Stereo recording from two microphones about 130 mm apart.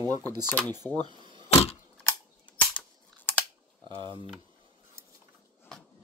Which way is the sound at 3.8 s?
35° right (ahead or behind).